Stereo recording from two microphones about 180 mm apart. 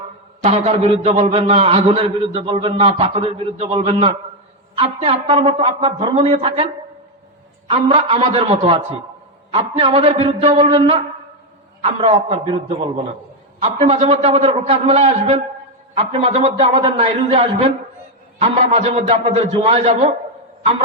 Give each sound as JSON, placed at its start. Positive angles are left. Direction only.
{"t": 0.4, "sound": "a man's voice", "side_deg": -40}
{"t": 7.7, "sound": "a man's voice", "side_deg": -30}